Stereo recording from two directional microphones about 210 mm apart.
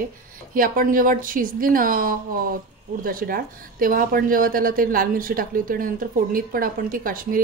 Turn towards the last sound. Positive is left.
turn(degrees=-40)  # may be behind; listen again after turning